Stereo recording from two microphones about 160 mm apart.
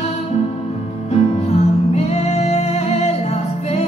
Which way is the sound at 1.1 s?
40° left (ahead or behind).